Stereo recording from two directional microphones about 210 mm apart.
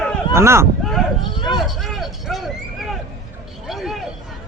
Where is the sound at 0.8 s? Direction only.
Centre (ahead or behind).